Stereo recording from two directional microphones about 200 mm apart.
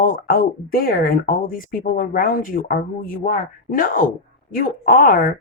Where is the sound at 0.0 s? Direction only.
45° left (ahead or behind).